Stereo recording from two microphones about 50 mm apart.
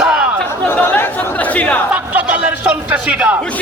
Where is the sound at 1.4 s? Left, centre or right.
Left.